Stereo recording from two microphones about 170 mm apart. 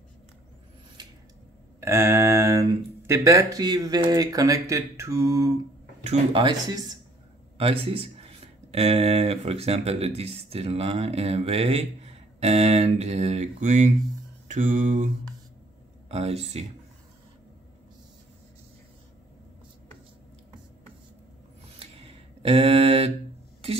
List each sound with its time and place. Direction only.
1.8 s a sound: 15° right (ahead or behind)
3.1 s speech: 20° right (ahead or behind)
6.0 s speech: 30° right (ahead or behind)
7.5 s speech: 35° right (ahead or behind)
14.5 s mantra: 45° right (ahead or behind)
16.1 s speech: 35° right (ahead or behind)
21.7 s a sound: 35° right (ahead or behind)